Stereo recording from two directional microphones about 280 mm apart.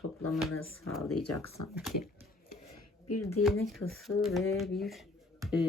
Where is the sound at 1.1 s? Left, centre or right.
Left.